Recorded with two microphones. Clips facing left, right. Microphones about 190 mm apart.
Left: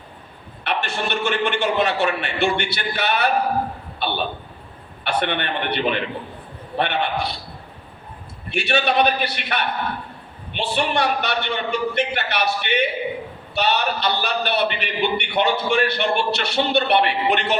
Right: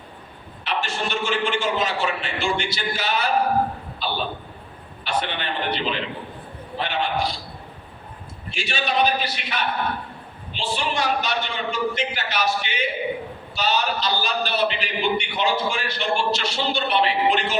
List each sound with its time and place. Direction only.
0.6 s a man's voice: 60° left (ahead or behind)
8.4 s a man's voice: 60° left (ahead or behind)